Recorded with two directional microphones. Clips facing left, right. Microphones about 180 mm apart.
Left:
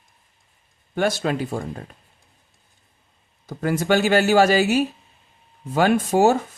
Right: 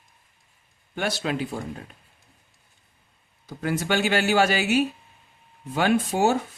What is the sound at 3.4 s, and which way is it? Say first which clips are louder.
A man's voice: left 5 dB; 45° left (ahead or behind).